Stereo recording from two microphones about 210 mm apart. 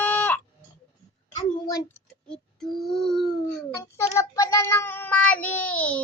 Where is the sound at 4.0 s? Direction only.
15° left (ahead or behind).